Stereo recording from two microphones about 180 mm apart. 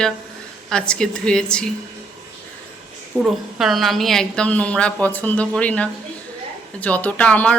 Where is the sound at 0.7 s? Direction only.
5° left (ahead or behind).